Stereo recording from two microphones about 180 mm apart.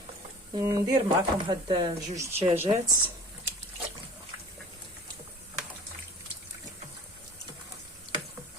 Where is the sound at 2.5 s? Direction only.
10° right (ahead or behind).